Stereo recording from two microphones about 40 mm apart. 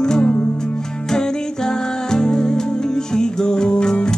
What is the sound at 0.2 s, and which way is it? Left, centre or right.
Music, left.